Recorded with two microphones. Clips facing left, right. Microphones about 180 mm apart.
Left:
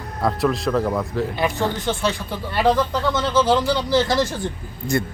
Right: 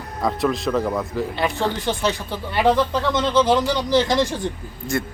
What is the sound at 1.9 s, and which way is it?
Speech, 10° right (ahead or behind).